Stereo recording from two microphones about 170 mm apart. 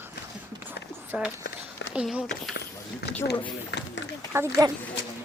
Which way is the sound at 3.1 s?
85° left.